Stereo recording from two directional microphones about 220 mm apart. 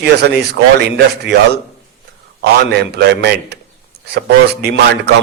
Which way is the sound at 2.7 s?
50° right (ahead or behind).